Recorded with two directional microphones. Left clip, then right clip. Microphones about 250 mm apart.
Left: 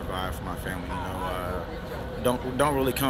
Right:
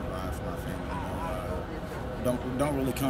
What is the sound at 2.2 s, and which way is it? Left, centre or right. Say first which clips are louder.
Speech: left 5 dB; centre.